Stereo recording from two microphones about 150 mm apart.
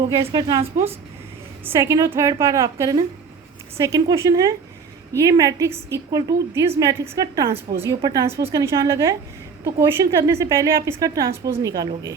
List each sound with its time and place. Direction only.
0.2 s a woman's voice: 40° right (ahead or behind)
1.6 s a woman's voice: 20° right (ahead or behind)